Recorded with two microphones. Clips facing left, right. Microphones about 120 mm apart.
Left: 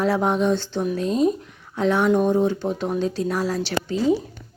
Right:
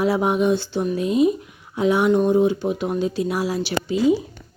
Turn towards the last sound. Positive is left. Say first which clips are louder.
# right 2 dB
turn(degrees=-15)  # may be behind; listen again after turning